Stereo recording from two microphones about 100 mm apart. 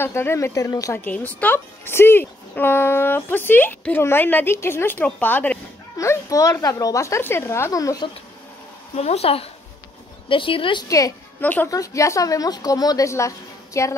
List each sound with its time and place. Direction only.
0.0 s speech: 25° left (ahead or behind)
1.0 s speech: 15° left (ahead or behind)
5.9 s speech: 30° left (ahead or behind)
8.9 s speech: 90° left
10.2 s speech: 60° left (ahead or behind)
10.9 s a woman's voice: 35° left (ahead or behind)
11.4 s speech: 20° left (ahead or behind)
11.7 s a woman's voice: 35° left (ahead or behind)